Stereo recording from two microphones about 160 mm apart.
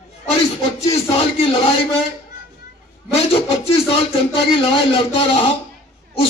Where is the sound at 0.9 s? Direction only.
35° left (ahead or behind).